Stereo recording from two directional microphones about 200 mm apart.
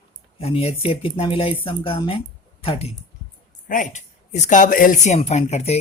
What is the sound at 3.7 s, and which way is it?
Speech, 40° left (ahead or behind).